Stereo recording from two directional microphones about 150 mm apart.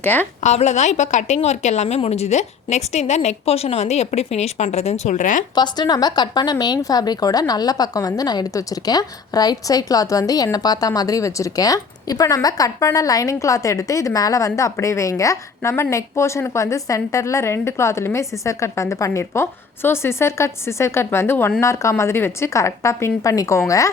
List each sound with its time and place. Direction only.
0.0 s a woman's voice: 10° left (ahead or behind)
0.4 s a woman's voice: 50° left (ahead or behind)
5.5 s a woman's voice: 30° left (ahead or behind)